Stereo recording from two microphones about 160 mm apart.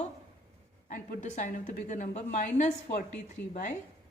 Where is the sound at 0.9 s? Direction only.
55° left (ahead or behind).